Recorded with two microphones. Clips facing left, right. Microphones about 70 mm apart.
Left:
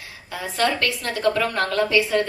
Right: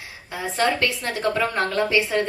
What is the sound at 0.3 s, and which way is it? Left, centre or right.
A woman's voice, right.